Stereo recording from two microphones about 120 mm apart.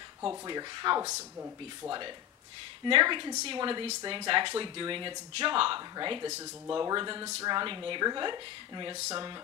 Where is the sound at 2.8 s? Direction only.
40° right (ahead or behind).